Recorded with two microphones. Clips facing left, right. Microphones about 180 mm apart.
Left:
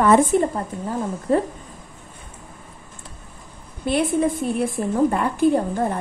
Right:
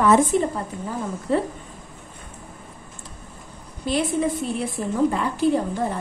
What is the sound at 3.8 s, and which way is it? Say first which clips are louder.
A woman's voice: left 3 dB; 55° left (ahead or behind).